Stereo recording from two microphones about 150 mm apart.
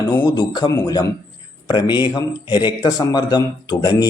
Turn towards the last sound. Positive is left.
turn(degrees=25)  # may be behind; listen again after turning